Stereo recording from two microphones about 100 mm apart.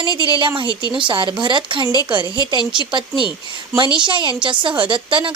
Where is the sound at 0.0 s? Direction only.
50° right (ahead or behind).